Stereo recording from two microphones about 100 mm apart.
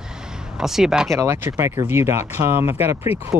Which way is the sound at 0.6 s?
5° right (ahead or behind).